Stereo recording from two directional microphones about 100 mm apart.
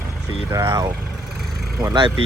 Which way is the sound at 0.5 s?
30° right (ahead or behind).